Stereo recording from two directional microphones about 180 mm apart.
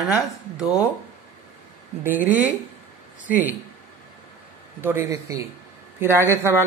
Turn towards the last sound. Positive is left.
turn(degrees=-15)  # may be behind; listen again after turning